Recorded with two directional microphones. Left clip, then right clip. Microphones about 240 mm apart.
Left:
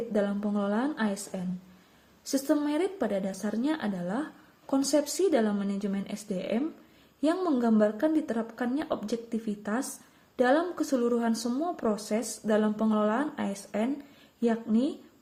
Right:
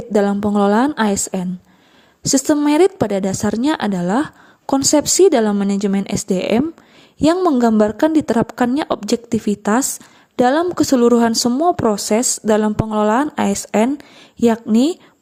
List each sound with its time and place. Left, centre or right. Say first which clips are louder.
0.1 s a woman's voice: right 16 dB; right